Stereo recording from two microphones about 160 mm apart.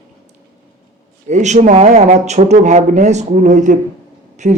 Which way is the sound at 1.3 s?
45° right (ahead or behind).